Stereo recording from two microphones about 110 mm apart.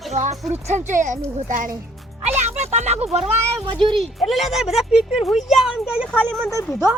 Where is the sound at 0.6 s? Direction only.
90° right.